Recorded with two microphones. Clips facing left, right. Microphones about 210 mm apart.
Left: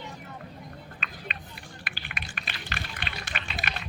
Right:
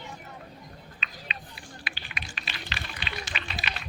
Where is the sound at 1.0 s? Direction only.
50° left (ahead or behind).